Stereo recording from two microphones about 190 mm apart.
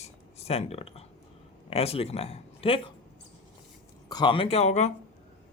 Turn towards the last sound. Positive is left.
turn(degrees=35)  # may be behind; listen again after turning